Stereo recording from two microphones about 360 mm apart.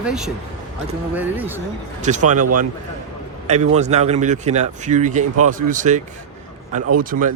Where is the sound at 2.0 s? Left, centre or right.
Centre.